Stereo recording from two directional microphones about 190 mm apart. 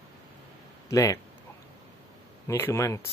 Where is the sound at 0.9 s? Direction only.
15° left (ahead or behind).